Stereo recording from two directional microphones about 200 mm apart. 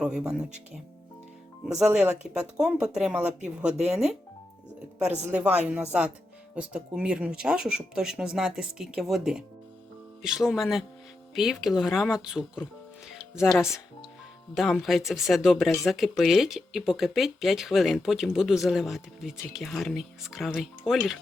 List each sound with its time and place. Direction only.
1.6 s speech: 5° right (ahead or behind)
5.3 s speech: 5° right (ahead or behind)